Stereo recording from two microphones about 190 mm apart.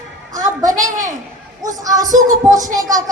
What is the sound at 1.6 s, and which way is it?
Speech, 20° right (ahead or behind).